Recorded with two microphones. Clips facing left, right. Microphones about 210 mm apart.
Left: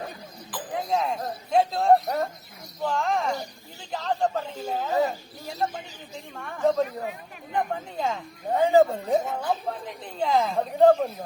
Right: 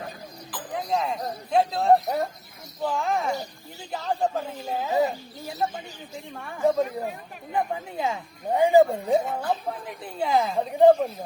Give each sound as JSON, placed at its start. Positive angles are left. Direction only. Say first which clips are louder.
{"t": 0.5, "sound": "speech", "louder": "left 1 dB", "side_deg": 0}